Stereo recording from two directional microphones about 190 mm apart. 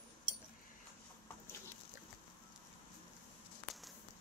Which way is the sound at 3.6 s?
Centre (ahead or behind).